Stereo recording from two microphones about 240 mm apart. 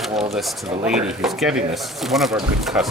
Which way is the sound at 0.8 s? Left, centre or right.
Centre.